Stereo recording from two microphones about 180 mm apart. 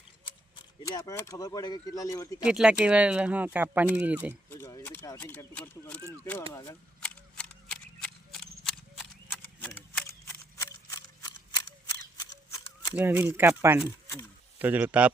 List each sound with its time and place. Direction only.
0.3 s speech: 25° left (ahead or behind)
2.5 s speech: 5° right (ahead or behind)
4.4 s speech: 15° left (ahead or behind)
7.0 s shuffling cards: 5° left (ahead or behind)
10.6 s a sound: 20° left (ahead or behind)
12.9 s speech: 10° right (ahead or behind)